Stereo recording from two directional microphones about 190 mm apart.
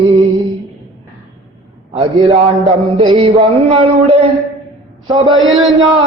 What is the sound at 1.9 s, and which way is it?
A man's voice, 30° right (ahead or behind).